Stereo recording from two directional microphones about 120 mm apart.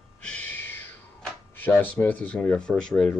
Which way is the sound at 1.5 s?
15° left (ahead or behind).